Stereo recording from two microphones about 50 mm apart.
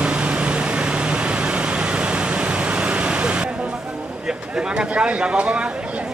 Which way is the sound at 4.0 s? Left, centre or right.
Right.